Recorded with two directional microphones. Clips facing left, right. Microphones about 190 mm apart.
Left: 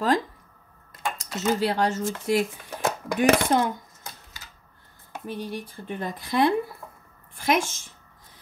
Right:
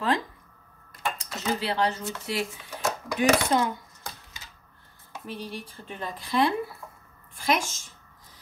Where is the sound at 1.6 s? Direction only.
45° left (ahead or behind).